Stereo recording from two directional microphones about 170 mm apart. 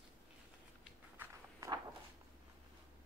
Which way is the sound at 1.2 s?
20° right (ahead or behind).